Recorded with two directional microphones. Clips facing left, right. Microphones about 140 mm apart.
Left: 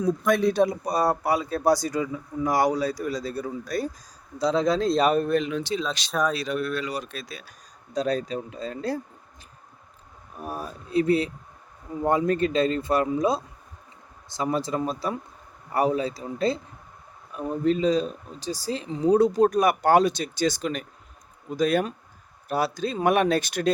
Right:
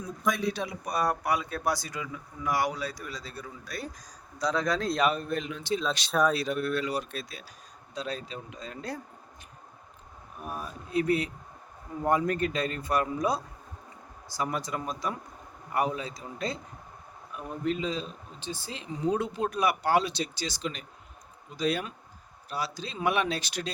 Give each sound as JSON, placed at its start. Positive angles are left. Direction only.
{"t": 0.3, "sound": "speech", "side_deg": 50}
{"t": 4.4, "sound": "speech", "side_deg": 25}
{"t": 5.1, "sound": "speech", "side_deg": 65}
{"t": 6.1, "sound": "speech", "side_deg": 0}
{"t": 6.4, "sound": "speech", "side_deg": 90}
{"t": 7.9, "sound": "speech", "side_deg": 40}
{"t": 10.3, "sound": "speech", "side_deg": 35}